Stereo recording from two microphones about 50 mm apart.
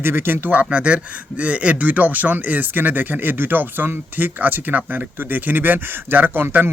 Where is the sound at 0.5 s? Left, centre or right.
Right.